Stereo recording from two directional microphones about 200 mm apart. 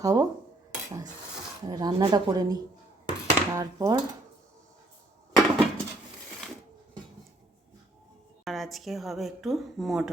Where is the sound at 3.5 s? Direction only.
15° right (ahead or behind).